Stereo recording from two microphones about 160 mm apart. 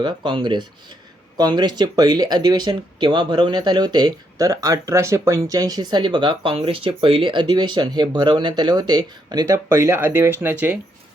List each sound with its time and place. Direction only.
0.0 s speech: 30° right (ahead or behind); by 10.8 s 10° right (ahead or behind)